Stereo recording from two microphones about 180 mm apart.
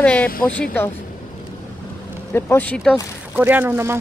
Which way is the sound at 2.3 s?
10° left (ahead or behind).